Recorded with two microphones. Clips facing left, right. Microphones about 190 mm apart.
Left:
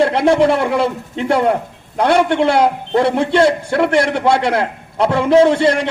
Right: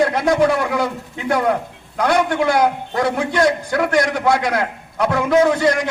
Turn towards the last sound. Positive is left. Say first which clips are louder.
# left 3 dB
turn(degrees=30)  # may be behind; listen again after turning